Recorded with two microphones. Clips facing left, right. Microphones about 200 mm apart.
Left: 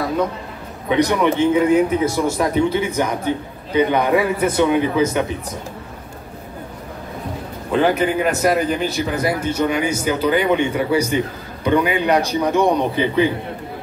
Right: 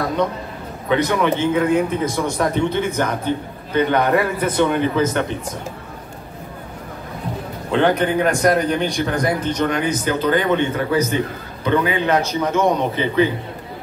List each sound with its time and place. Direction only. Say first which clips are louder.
0.8 s speech: left 1 dB; 15° left (ahead or behind)
7.7 s speech: even; 5° left (ahead or behind)